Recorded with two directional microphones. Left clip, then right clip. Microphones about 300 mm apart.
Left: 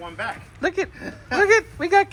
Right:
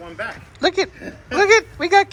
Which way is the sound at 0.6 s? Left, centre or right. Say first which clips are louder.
Right 5 dB; centre.